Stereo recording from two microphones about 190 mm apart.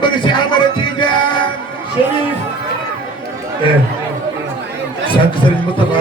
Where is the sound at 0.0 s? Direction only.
25° left (ahead or behind).